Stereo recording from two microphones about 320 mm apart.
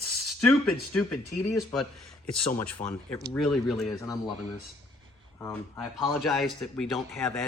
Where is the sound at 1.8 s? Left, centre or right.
Left.